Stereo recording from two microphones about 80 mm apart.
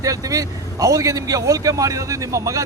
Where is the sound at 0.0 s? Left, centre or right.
Right.